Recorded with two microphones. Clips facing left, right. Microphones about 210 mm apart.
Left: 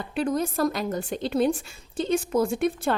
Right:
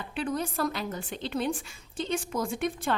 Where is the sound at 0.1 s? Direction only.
40° left (ahead or behind).